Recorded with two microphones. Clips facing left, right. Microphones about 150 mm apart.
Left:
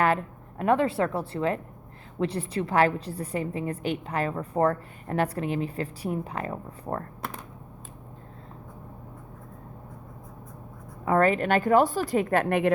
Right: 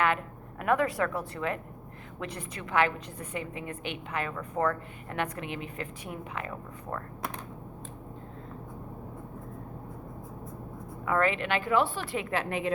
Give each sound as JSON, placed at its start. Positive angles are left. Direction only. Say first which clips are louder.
{"t": 0.6, "sound": "a woman's voice", "louder": "left 4 dB", "side_deg": 30}
{"t": 11.0, "sound": "a woman's voice", "louder": "left 5 dB", "side_deg": 35}